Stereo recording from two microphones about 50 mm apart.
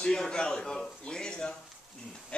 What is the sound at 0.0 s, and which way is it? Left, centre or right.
A man's voice, centre.